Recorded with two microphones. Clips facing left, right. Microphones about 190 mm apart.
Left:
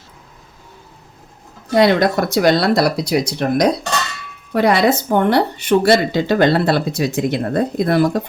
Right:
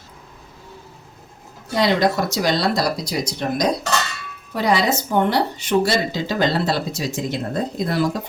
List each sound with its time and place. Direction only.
1.7 s speech: 55° left (ahead or behind)